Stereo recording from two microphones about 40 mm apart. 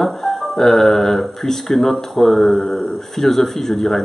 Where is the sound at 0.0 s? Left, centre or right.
Centre.